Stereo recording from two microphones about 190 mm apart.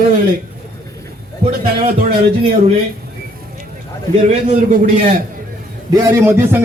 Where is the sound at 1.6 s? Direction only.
50° right (ahead or behind).